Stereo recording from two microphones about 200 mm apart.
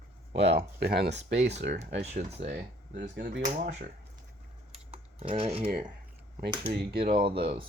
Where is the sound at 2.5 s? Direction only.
60° right (ahead or behind).